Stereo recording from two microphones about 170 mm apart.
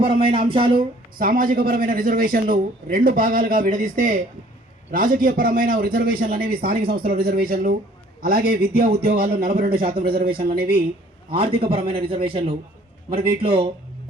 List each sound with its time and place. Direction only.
0.2 s a man's voice: 30° right (ahead or behind)
0.8 s a man's voice: 55° right (ahead or behind)
11.3 s a man's voice: 35° right (ahead or behind)